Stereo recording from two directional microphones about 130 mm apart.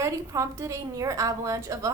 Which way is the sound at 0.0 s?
25° right (ahead or behind).